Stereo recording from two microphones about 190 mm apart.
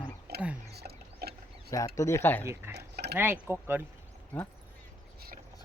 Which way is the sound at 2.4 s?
15° right (ahead or behind).